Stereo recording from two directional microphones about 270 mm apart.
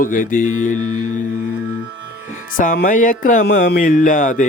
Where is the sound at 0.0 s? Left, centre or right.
Left.